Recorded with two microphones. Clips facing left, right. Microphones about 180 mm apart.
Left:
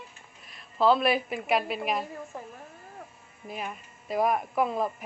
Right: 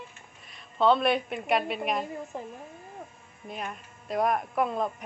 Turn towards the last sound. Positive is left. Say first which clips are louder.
# left 1 dB
turn(degrees=0)  # may be behind; listen again after turning